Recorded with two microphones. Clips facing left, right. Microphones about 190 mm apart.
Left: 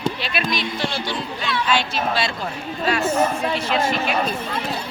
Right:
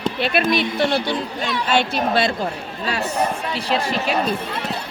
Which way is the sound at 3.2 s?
35° right (ahead or behind).